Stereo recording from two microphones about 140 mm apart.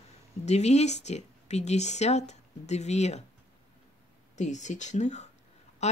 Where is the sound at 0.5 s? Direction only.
50° left (ahead or behind).